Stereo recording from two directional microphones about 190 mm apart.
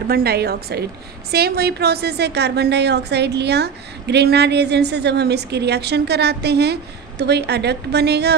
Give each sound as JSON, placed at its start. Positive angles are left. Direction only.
{"t": 0.1, "sound": "a woman's voice", "side_deg": -55}